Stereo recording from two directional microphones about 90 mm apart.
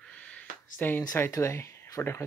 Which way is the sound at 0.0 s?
15° left (ahead or behind).